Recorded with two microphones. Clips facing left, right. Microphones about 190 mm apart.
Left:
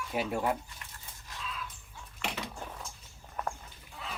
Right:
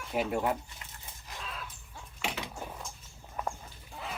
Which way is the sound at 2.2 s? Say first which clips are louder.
Right 1 dB; centre (ahead or behind).